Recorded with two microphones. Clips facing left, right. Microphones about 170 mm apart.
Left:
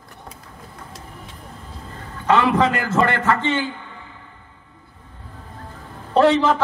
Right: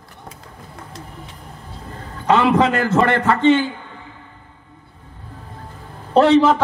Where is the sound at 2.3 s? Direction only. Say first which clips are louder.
Right 2 dB; 20° right (ahead or behind).